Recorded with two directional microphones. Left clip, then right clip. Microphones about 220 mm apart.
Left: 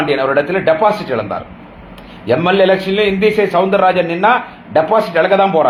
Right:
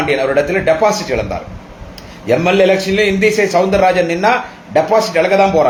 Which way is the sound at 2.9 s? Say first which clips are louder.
Even; 5° right (ahead or behind).